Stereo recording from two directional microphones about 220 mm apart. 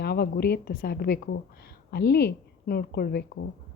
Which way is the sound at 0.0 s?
45° left (ahead or behind).